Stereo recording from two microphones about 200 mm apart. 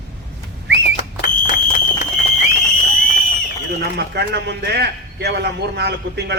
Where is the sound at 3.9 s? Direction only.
55° right (ahead or behind).